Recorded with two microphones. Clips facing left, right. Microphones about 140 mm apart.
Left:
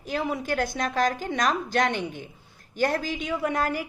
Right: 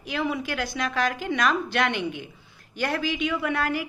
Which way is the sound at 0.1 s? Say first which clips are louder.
Even; 40° left (ahead or behind).